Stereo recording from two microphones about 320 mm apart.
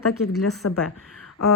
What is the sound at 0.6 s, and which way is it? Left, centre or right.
Speech, left.